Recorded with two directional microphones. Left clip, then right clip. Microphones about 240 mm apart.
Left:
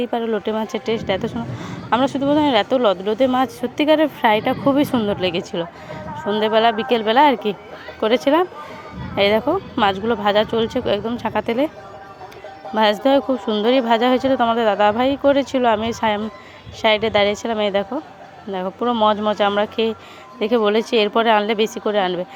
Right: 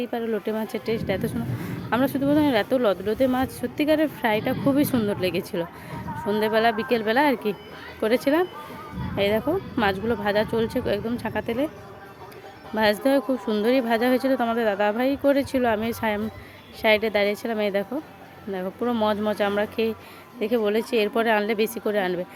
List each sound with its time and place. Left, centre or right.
0.0 s speech: centre
12.7 s speech: centre